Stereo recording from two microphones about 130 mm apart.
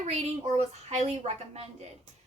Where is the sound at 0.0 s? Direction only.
60° right (ahead or behind).